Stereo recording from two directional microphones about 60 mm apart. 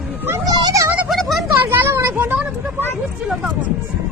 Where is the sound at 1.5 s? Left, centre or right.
Right.